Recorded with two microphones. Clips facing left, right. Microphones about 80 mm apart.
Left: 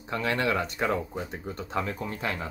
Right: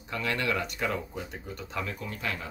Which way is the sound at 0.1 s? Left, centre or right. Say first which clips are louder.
Left 3 dB; left.